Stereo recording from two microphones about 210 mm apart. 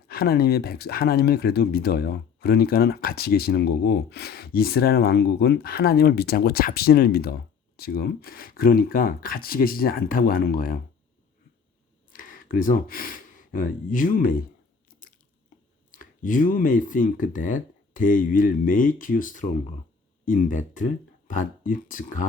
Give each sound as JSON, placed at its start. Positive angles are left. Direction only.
{"t": 0.1, "sound": "speech", "side_deg": 45}
{"t": 12.1, "sound": "speech", "side_deg": 40}
{"t": 15.9, "sound": "speech", "side_deg": 40}